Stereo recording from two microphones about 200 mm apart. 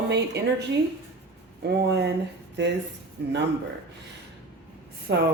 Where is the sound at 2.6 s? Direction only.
60° right (ahead or behind).